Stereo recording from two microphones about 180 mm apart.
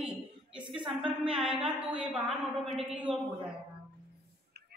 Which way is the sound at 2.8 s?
35° right (ahead or behind).